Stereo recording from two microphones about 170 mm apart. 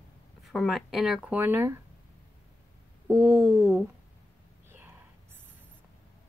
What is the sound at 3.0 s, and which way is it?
Speech, 15° right (ahead or behind).